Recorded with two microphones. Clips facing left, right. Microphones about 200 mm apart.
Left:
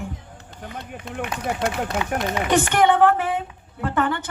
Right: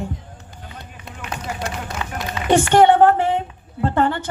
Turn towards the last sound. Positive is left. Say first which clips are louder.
# right 4 dB
turn(degrees=-35)  # may be behind; listen again after turning